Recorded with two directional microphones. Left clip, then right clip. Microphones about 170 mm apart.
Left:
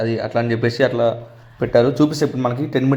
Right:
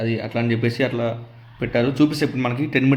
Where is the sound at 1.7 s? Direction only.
15° left (ahead or behind).